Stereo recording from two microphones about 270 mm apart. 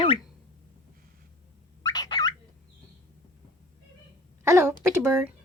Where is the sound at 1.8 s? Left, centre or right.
Centre.